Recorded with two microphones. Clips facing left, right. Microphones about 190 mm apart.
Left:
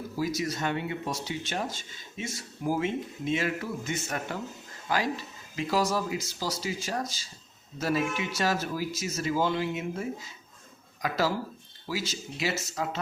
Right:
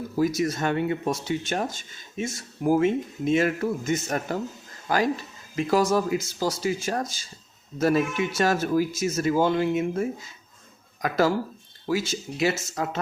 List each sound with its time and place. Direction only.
0.2 s speech: 50° right (ahead or behind)